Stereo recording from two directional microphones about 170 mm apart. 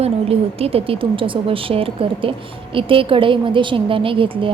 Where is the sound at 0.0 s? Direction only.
35° right (ahead or behind).